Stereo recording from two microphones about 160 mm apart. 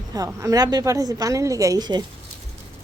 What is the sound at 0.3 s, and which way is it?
A woman's voice, 20° right (ahead or behind).